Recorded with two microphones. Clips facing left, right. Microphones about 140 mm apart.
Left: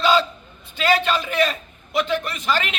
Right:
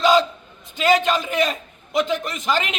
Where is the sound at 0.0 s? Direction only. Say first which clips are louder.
Right 2 dB; 15° right (ahead or behind).